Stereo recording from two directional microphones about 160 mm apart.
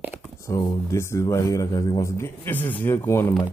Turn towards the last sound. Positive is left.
turn(degrees=15)  # may be behind; listen again after turning